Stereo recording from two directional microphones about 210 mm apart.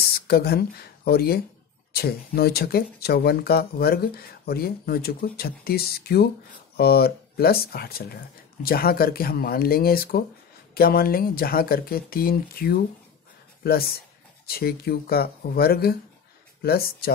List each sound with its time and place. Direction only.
0.3 s speech: 50° left (ahead or behind)